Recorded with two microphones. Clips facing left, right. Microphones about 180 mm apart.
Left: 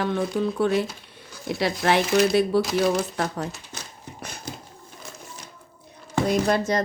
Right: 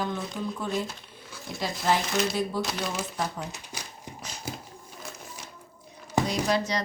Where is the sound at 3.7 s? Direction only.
10° right (ahead or behind).